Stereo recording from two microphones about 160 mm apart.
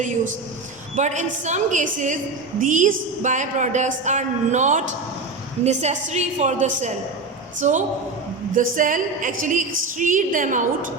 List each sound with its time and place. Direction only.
0.9 s a woman's voice: 50° right (ahead or behind)